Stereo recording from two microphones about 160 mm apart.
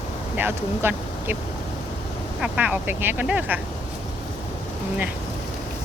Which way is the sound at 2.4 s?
5° right (ahead or behind).